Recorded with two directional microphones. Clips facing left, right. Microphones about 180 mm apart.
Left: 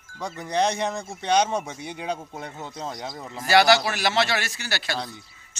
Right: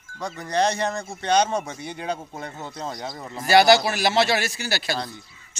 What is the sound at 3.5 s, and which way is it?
A man's voice, 40° right (ahead or behind).